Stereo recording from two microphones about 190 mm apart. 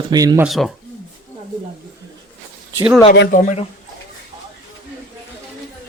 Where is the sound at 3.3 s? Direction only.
35° left (ahead or behind).